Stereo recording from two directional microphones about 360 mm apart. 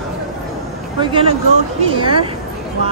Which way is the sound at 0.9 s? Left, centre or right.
Centre.